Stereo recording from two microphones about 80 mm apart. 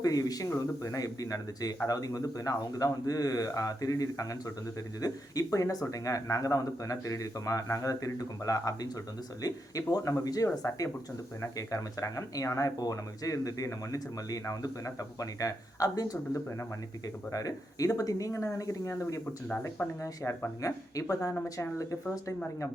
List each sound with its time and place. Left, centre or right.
0.0 s speech: left
17.3 s speech: left